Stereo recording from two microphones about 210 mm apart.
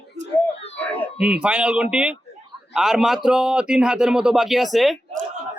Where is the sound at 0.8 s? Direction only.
5° left (ahead or behind).